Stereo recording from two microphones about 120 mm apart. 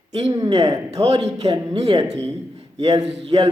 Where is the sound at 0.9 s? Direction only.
60° right (ahead or behind).